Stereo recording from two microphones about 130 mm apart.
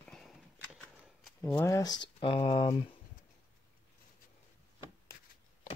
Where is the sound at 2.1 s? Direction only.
45° left (ahead or behind).